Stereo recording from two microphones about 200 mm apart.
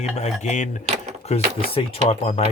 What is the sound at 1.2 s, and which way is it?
Speech, 30° left (ahead or behind).